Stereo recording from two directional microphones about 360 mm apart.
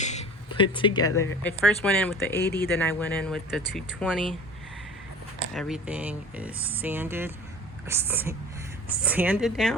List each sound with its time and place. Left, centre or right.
0.0 s speech: centre
2.3 s speech: left
2.6 s speech: centre
5.5 s speech: centre